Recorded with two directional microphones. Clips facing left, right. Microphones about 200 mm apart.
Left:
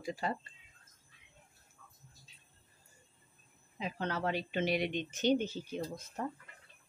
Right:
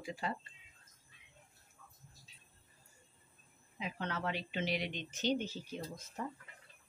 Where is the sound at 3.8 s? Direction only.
35° left (ahead or behind); by 6.3 s 55° left (ahead or behind).